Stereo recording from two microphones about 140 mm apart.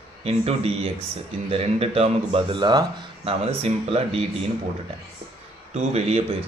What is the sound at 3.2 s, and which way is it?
Speech, 45° right (ahead or behind).